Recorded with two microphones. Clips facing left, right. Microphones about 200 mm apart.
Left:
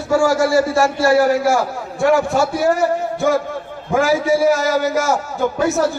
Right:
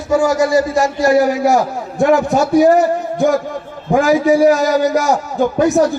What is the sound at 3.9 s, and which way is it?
A man's voice, 15° right (ahead or behind).